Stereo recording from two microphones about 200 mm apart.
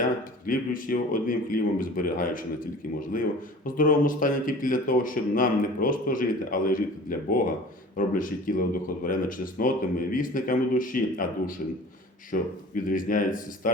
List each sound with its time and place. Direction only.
0.4 s speech: 45° left (ahead or behind)